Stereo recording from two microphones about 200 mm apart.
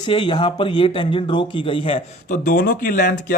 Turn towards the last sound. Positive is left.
turn(degrees=40)  # may be behind; listen again after turning